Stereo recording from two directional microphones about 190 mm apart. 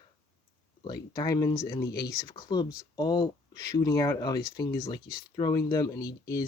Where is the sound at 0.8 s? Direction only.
20° left (ahead or behind).